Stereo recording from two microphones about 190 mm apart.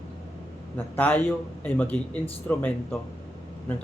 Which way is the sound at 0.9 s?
10° left (ahead or behind).